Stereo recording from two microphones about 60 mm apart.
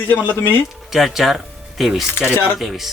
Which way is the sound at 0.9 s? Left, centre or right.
Centre.